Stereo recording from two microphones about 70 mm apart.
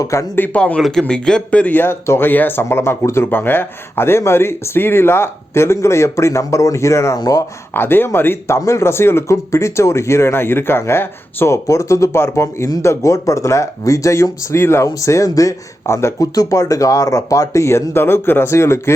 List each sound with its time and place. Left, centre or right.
0.0 s speech: left
0.3 s a man's voice: left
0.8 s speech: centre; by 7.2 s left
7.2 s speech: left
7.7 s speech: left
8.5 s speech: left
11.5 s speech: left
16.2 s speech: left